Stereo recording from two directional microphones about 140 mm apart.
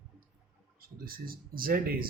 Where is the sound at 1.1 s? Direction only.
90° right.